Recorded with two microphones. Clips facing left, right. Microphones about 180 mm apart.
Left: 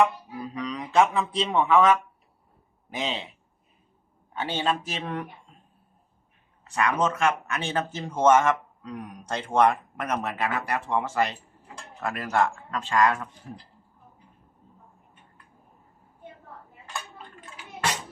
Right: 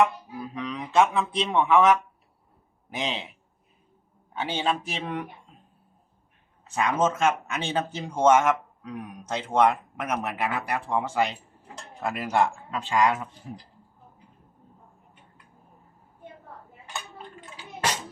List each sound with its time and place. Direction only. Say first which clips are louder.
0.0 s a man's voice: even; centre (ahead or behind)
1.7 s speech: even; 10° right (ahead or behind)
3.0 s a man's voice: even; centre (ahead or behind)
4.4 s speech: even; 10° right (ahead or behind)
7.0 s speech: right 1 dB; 20° right (ahead or behind)
17.3 s a sound: right 1 dB; 20° right (ahead or behind)